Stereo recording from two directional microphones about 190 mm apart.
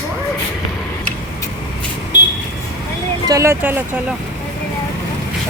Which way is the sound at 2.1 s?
65° left (ahead or behind).